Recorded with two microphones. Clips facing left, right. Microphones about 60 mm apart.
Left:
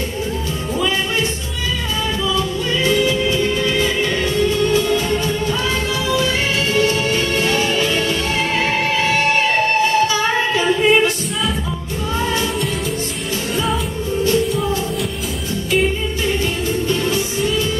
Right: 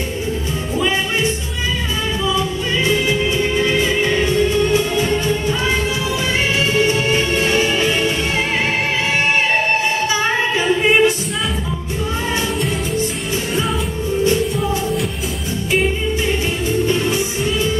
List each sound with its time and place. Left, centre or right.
2.2 s music: right
6.7 s music: centre
10.0 s music: right
10.6 s singing: centre
16.8 s music: centre